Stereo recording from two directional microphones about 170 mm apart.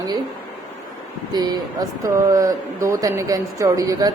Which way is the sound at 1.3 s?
25° right (ahead or behind).